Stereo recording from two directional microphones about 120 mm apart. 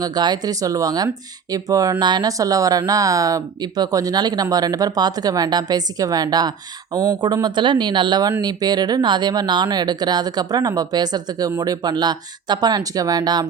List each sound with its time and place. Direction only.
0.0 s speech: 35° right (ahead or behind)